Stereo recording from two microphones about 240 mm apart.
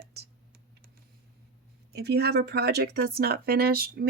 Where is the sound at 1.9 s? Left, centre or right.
Right.